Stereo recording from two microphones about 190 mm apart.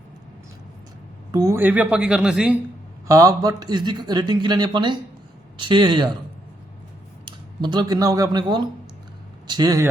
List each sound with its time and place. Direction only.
1.3 s a woman's voice: 20° right (ahead or behind)
3.1 s speech: 20° right (ahead or behind)
7.3 s speech: 25° right (ahead or behind)